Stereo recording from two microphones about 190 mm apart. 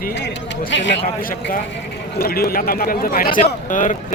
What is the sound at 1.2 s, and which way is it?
A man's voice, 50° left (ahead or behind).